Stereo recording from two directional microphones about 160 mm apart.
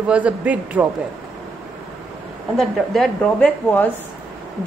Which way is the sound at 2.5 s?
Centre (ahead or behind).